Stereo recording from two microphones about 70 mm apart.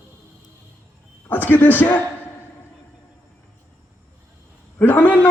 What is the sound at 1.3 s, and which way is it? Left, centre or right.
Speech, left.